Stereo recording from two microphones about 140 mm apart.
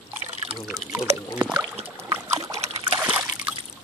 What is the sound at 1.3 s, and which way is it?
Rowboat, 10° right (ahead or behind).